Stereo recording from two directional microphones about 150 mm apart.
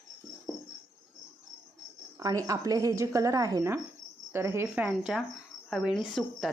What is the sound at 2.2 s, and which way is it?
A woman's voice, 25° right (ahead or behind).